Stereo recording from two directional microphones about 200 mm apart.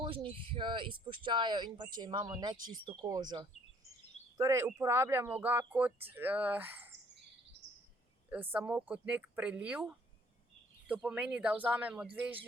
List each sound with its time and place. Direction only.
0.0 s speech: 25° right (ahead or behind); by 6.9 s 10° right (ahead or behind)
8.3 s speech: 10° right (ahead or behind)